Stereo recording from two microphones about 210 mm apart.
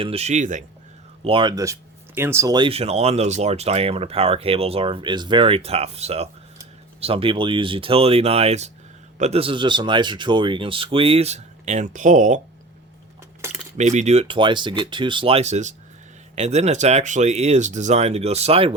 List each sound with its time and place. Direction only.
0.0 s speech: 30° right (ahead or behind)
1.2 s speech: 25° right (ahead or behind)
13.4 s keys jangling: 10° right (ahead or behind)
13.7 s speech: 35° right (ahead or behind)